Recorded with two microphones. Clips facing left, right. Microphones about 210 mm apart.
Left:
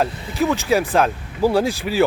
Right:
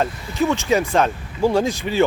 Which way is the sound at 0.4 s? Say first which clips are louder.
Even; centre (ahead or behind).